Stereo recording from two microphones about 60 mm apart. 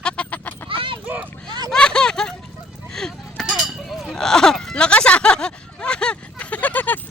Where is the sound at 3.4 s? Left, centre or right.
Centre.